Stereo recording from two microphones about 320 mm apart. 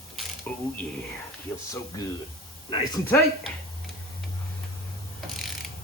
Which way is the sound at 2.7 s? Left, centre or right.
Centre.